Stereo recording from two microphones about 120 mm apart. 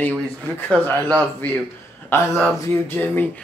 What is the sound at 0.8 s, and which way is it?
Speech, 15° left (ahead or behind).